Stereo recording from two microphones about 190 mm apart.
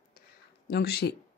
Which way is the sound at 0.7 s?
55° left (ahead or behind).